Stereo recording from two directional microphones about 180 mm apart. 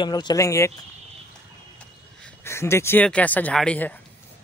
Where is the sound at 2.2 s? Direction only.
15° left (ahead or behind).